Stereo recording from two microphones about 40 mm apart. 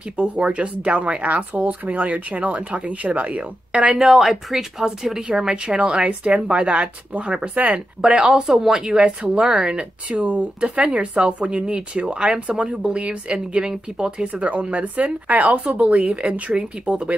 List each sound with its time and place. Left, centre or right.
0.2 s speech: right
3.8 s a woman's voice: centre; by 7.8 s right
8.0 s speech: right
14.2 s speech: right